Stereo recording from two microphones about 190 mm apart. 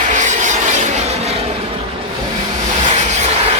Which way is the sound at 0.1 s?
40° right (ahead or behind).